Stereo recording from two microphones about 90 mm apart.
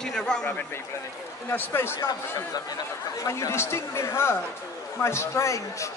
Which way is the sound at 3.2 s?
35° left (ahead or behind).